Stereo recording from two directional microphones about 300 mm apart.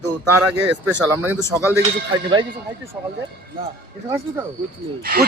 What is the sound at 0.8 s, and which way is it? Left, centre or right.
Speech, centre.